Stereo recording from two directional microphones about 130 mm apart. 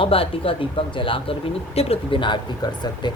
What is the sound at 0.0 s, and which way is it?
A woman's voice, 45° left (ahead or behind).